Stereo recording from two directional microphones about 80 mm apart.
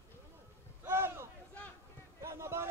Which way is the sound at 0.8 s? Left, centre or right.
Right.